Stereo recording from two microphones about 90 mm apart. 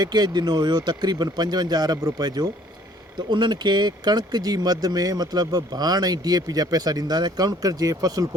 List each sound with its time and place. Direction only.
0.0 s speech: 50° right (ahead or behind)